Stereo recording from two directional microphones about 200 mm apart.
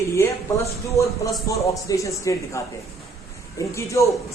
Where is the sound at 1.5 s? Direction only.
15° left (ahead or behind).